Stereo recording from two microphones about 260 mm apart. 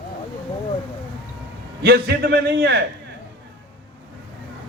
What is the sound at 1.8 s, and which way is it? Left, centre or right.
A man's voice, right.